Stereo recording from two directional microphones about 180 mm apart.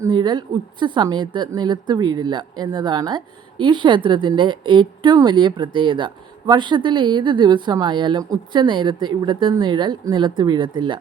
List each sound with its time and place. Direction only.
0.0 s a woman's voice: 25° right (ahead or behind)